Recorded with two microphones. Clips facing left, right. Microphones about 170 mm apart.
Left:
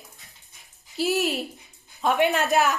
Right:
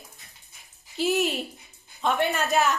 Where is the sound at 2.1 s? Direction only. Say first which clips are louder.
Left 5 dB; 15° left (ahead or behind).